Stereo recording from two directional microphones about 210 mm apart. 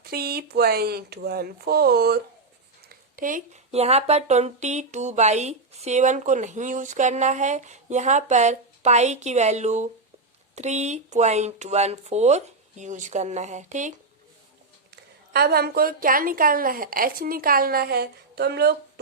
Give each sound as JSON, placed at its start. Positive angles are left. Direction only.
{"t": 0.0, "sound": "a woman's voice", "side_deg": -45}
{"t": 14.8, "sound": "a woman's voice", "side_deg": -50}